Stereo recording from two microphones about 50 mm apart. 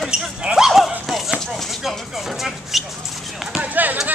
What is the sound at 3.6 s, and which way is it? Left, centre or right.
Speech, right.